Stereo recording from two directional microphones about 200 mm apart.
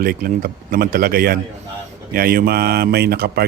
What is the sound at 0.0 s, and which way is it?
A man's voice, 45° right (ahead or behind).